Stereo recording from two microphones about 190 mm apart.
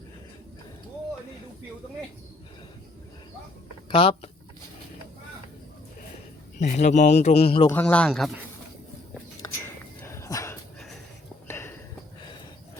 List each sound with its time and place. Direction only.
3.8 s speech: 25° left (ahead or behind)
6.6 s a man's voice: 40° left (ahead or behind)
7.7 s a man's voice: 5° left (ahead or behind)
10.0 s dog: 15° left (ahead or behind)
11.4 s a sound: 15° left (ahead or behind)